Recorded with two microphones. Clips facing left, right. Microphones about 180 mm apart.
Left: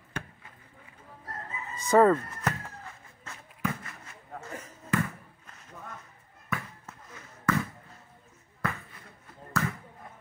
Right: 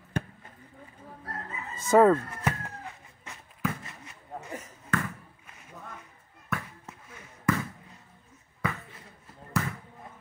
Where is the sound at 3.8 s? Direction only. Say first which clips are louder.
Even; 15° right (ahead or behind).